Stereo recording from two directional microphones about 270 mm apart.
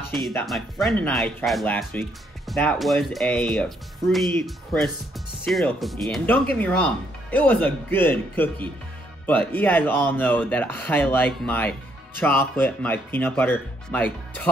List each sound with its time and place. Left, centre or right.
0.1 s speech: centre